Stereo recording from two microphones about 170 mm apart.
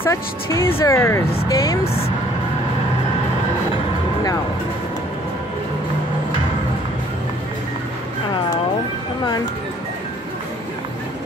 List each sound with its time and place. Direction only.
0.0 s speech: 15° left (ahead or behind)